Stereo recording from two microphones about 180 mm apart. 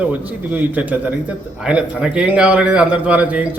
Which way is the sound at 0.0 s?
10° right (ahead or behind).